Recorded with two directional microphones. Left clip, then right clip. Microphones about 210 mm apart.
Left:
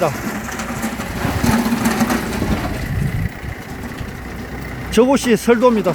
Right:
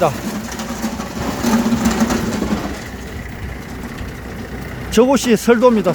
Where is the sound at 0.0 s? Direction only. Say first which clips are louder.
Right 2 dB; 10° right (ahead or behind).